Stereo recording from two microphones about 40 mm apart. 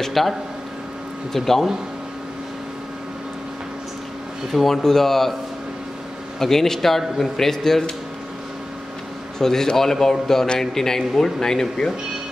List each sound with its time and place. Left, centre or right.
0.0 s a man's voice: centre
4.5 s a man's voice: centre
6.4 s a man's voice: centre
9.4 s a man's voice: centre